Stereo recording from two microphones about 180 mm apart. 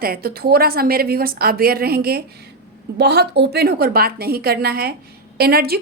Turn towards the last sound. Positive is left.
turn(degrees=-60)  # may be behind; listen again after turning